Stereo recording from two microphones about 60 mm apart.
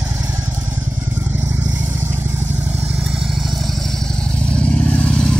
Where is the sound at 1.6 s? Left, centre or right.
Right.